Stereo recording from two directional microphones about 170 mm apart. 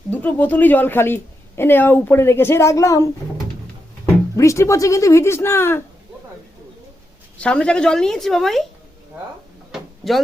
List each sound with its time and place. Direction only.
0.1 s a woman's voice: 10° left (ahead or behind)
7.3 s a woman's voice: 5° left (ahead or behind)
9.7 s a sound: centre (ahead or behind)